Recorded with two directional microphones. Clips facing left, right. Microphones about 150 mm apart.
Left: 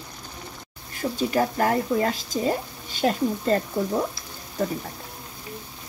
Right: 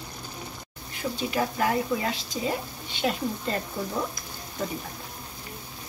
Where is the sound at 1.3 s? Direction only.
45° left (ahead or behind).